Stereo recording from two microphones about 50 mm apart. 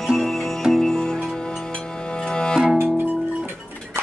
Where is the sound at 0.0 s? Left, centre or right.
Centre.